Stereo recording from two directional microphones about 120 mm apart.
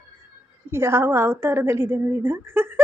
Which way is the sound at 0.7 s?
20° right (ahead or behind).